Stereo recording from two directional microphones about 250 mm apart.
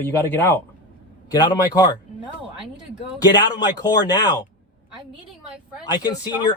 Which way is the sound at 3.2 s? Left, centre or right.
Centre.